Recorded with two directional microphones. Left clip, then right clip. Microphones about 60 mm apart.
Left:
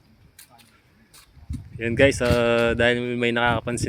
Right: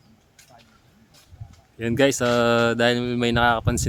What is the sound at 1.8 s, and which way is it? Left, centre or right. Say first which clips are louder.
Speech: left 1 dB; right.